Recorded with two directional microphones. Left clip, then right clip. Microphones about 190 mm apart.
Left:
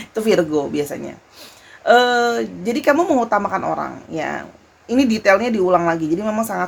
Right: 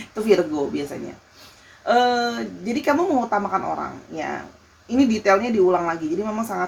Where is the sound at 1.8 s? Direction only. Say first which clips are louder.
Left 5 dB; 55° left (ahead or behind).